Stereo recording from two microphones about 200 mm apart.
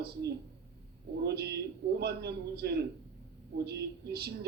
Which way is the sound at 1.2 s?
55° right (ahead or behind).